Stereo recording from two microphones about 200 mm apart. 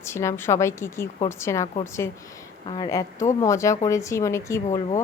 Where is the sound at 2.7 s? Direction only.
20° left (ahead or behind).